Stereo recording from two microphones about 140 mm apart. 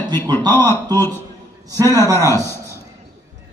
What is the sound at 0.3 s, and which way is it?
Speech, 30° right (ahead or behind).